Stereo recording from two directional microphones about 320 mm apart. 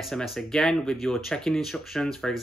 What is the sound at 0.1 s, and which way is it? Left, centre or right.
Speech, centre.